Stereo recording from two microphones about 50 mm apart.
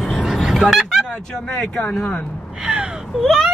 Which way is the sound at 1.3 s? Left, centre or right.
Centre.